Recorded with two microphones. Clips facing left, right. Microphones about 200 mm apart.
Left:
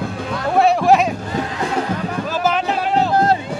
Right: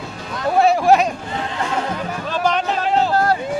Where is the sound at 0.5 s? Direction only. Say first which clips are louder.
Even; centre (ahead or behind).